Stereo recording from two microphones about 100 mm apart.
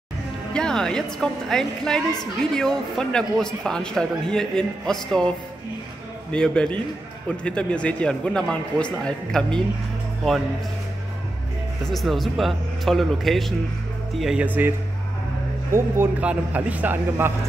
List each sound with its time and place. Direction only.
0.5 s a man's voice: 5° left (ahead or behind)
6.3 s a man's voice: 10° left (ahead or behind)
11.8 s a man's voice: centre (ahead or behind)
14.4 s a man's voice: 15° right (ahead or behind)
15.7 s a man's voice: 20° right (ahead or behind)